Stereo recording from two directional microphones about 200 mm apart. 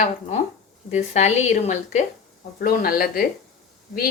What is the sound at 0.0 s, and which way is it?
Speech, 35° left (ahead or behind).